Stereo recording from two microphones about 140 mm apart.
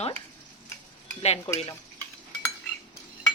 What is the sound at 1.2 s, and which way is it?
Cutlery, 50° left (ahead or behind).